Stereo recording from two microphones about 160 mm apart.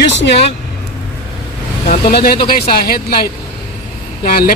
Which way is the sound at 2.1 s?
75° left (ahead or behind).